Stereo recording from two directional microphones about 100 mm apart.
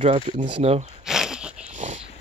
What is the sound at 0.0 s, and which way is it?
Speech, 90° right.